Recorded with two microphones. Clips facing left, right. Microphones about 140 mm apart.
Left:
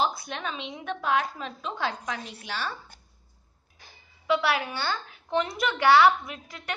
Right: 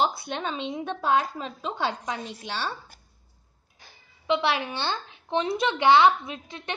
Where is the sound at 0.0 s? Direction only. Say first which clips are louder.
Right 2 dB; 25° right (ahead or behind).